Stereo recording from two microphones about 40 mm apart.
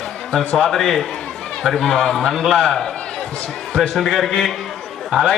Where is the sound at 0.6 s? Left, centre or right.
Centre.